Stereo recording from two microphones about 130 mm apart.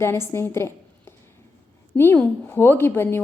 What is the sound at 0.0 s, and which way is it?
A woman's voice, 20° left (ahead or behind).